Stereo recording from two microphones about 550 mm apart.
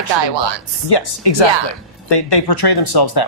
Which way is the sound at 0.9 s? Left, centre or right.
Left.